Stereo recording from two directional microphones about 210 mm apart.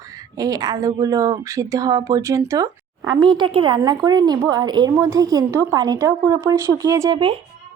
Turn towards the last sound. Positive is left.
turn(degrees=-25)  # may be behind; listen again after turning